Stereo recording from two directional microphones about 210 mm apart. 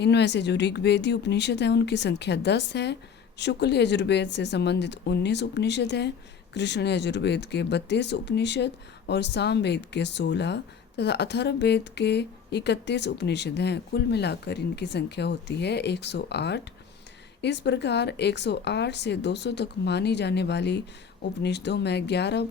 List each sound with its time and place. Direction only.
0.0 s speech: 55° left (ahead or behind)